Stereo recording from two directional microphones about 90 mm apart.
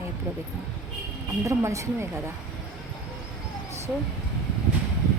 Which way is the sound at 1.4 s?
35° right (ahead or behind).